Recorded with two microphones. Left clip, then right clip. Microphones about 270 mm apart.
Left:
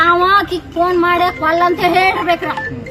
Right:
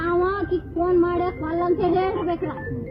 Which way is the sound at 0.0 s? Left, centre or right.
Left.